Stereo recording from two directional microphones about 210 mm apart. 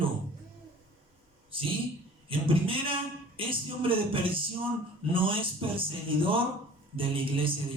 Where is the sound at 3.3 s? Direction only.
25° right (ahead or behind).